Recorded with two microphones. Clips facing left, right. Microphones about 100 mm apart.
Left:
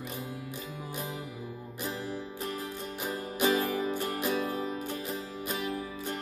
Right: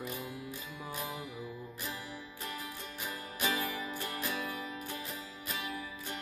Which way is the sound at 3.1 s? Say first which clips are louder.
Left 8 dB; 35° left (ahead or behind).